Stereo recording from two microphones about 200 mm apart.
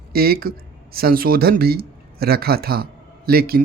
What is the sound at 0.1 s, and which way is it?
Speech, 50° right (ahead or behind).